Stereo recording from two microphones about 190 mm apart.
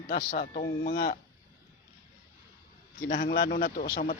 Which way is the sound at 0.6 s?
60° left (ahead or behind).